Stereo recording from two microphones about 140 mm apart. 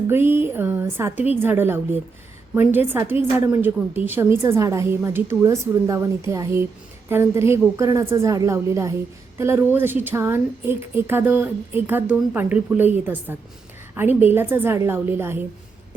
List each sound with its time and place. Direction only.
0.1 s a woman's voice: 15° right (ahead or behind)